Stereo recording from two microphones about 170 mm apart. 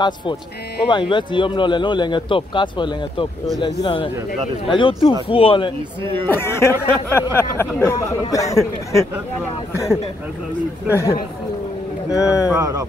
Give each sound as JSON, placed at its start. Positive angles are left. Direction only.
{"t": 0.0, "sound": "speech", "side_deg": 25}
{"t": 6.2, "sound": "speech", "side_deg": 15}
{"t": 12.1, "sound": "speech", "side_deg": 20}
{"t": 12.5, "sound": "speech", "side_deg": -20}